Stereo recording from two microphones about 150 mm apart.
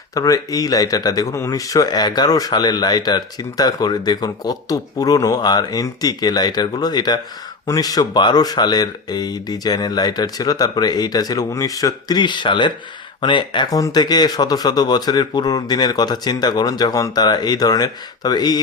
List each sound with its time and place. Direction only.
0.1 s speech: 20° left (ahead or behind)